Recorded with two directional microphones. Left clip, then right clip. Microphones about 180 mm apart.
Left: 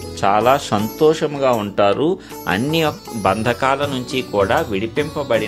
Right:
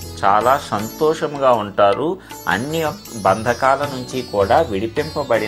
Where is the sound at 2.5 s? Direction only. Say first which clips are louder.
Left 3 dB; 45° left (ahead or behind).